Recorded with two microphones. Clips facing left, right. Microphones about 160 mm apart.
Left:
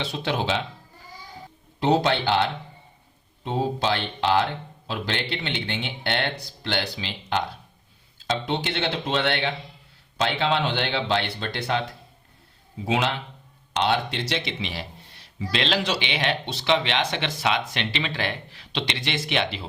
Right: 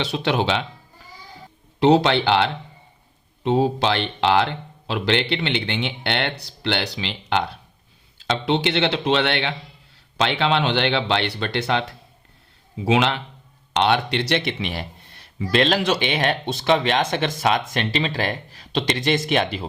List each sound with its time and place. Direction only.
0.0 s speech: 75° right (ahead or behind)
1.8 s speech: 80° right
12.7 s speech: 85° right; by 19.6 s 45° right (ahead or behind)